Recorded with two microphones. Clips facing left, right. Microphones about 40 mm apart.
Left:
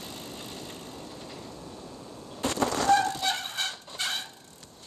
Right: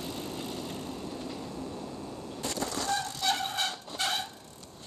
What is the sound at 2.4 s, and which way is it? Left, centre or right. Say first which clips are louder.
Vehicle: left 7 dB; left.